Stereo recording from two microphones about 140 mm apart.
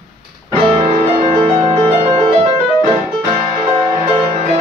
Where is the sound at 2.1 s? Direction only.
55° right (ahead or behind).